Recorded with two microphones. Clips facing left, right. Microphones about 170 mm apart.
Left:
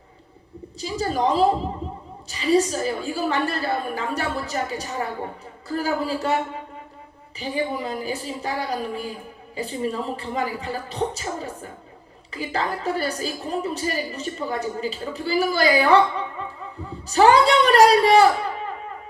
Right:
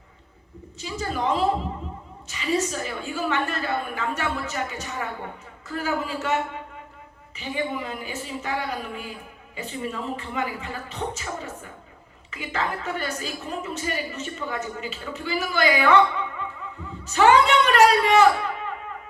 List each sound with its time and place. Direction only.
0.8 s a woman's voice: 35° left (ahead or behind)
1.8 s a sound: 35° left (ahead or behind)
2.2 s a woman's voice: 35° left (ahead or behind)